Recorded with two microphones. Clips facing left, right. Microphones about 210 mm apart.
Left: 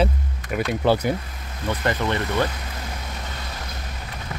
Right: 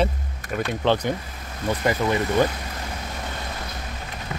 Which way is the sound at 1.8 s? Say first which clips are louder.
Right 2 dB; 10° right (ahead or behind).